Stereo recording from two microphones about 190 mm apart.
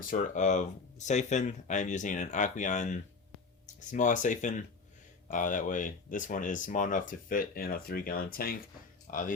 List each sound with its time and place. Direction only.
0.1 s speech: 40° left (ahead or behind)